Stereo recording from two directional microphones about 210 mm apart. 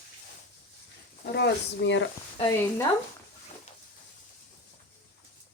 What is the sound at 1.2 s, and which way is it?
Speech, 50° left (ahead or behind).